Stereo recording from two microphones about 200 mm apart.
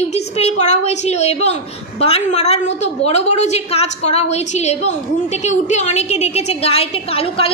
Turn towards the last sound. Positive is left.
turn(degrees=30)  # may be behind; listen again after turning